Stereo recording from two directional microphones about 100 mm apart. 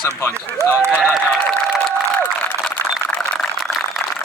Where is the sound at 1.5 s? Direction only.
5° left (ahead or behind).